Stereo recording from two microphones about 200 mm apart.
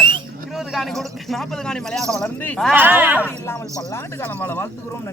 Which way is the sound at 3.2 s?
10° left (ahead or behind).